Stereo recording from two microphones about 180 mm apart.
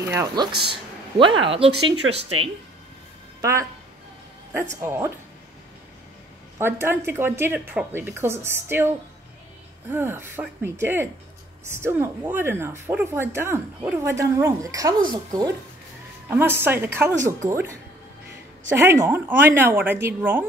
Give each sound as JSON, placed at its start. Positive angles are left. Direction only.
{"t": 0.0, "sound": "a woman's voice", "side_deg": -15}
{"t": 0.6, "sound": "speech", "side_deg": -30}
{"t": 3.3, "sound": "speech", "side_deg": -15}
{"t": 4.8, "sound": "a woman's voice", "side_deg": -15}
{"t": 6.6, "sound": "a woman's voice", "side_deg": -10}
{"t": 9.8, "sound": "a woman's voice", "side_deg": -10}
{"t": 16.3, "sound": "a woman's voice", "side_deg": -15}
{"t": 18.7, "sound": "a woman's voice", "side_deg": -10}